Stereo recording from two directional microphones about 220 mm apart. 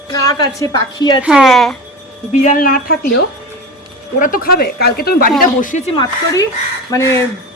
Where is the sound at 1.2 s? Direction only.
Centre (ahead or behind).